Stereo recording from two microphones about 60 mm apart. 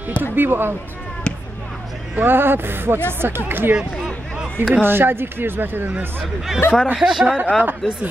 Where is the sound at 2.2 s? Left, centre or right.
Right.